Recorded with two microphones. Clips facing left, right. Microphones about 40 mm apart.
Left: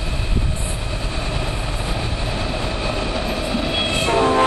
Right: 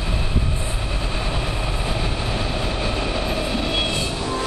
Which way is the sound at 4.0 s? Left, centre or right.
Left.